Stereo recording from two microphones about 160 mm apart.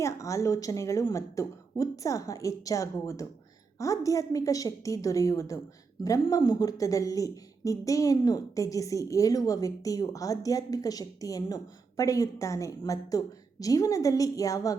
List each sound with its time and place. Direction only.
0.0 s a woman's voice: 20° left (ahead or behind)